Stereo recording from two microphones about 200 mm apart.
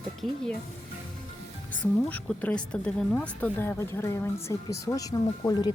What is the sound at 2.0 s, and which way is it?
Speech, 10° left (ahead or behind).